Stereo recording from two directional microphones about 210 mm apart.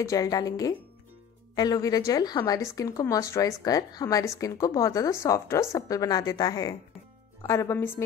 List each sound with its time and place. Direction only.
0.0 s speech: 15° left (ahead or behind)